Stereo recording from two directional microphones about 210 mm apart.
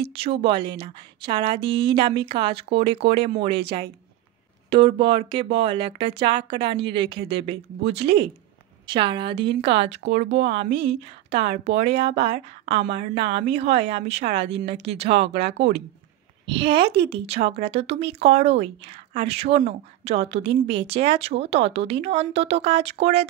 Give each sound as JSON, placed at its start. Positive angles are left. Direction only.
{"t": 0.1, "sound": "a woman's voice", "side_deg": -25}